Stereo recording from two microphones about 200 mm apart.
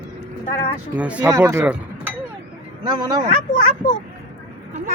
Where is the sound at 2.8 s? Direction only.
20° right (ahead or behind).